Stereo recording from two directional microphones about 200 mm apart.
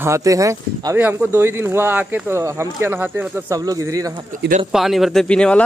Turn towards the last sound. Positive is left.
turn(degrees=5)  # may be behind; listen again after turning